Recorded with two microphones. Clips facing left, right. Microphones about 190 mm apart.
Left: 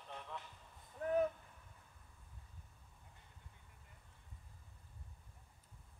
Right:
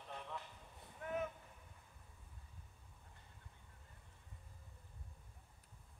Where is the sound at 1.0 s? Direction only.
35° left (ahead or behind).